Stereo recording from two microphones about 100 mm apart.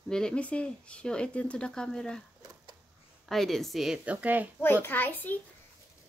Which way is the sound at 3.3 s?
5° left (ahead or behind).